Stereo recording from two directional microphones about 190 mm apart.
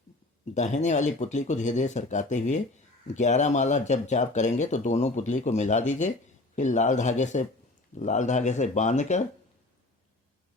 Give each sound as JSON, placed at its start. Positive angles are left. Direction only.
{"t": 0.5, "sound": "speech", "side_deg": 40}